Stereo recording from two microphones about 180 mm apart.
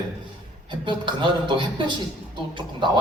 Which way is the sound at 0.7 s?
25° right (ahead or behind).